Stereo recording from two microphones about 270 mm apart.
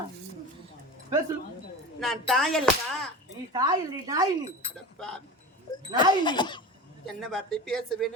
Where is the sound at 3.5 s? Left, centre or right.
Centre.